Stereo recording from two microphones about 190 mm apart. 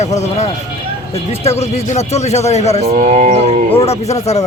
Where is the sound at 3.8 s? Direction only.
35° left (ahead or behind).